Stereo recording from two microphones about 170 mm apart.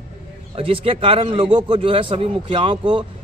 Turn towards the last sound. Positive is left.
turn(degrees=-30)  # may be behind; listen again after turning